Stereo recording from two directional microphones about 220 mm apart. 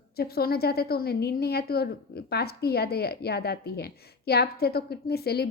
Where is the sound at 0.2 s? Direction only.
45° left (ahead or behind).